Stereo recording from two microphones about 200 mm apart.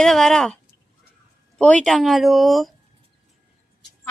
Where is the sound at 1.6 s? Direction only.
5° left (ahead or behind).